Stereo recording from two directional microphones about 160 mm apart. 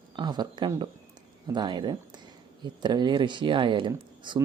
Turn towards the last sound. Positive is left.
turn(degrees=-30)  # may be behind; listen again after turning